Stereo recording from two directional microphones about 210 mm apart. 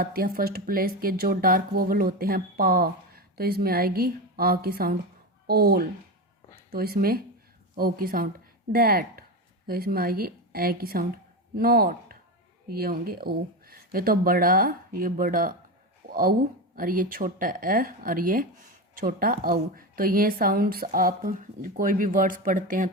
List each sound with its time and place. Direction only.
0.0 s speech: 45° right (ahead or behind)
16.0 s a sound: 45° right (ahead or behind)
16.7 s speech: 40° right (ahead or behind)